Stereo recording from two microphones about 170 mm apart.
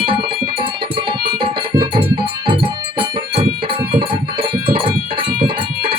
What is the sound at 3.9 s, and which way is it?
Music, 30° right (ahead or behind).